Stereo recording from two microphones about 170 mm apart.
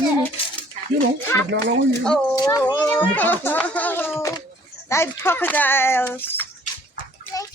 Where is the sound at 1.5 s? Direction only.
90° right.